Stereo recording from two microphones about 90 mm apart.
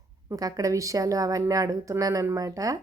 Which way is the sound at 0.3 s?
40° right (ahead or behind).